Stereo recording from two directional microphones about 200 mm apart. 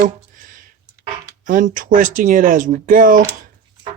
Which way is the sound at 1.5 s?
40° right (ahead or behind).